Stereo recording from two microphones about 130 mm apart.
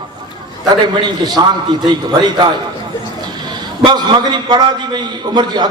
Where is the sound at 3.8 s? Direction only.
35° right (ahead or behind).